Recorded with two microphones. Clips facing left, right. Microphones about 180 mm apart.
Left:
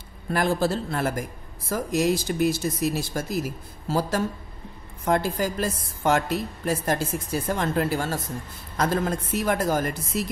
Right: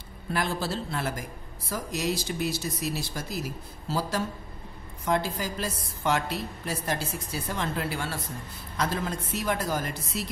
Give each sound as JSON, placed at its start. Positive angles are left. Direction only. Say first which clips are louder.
{"t": 0.3, "sound": "a woman's voice", "louder": "left 6 dB", "side_deg": 50}